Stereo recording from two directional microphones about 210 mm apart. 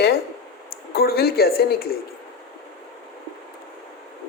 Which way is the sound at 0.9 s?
50° left (ahead or behind).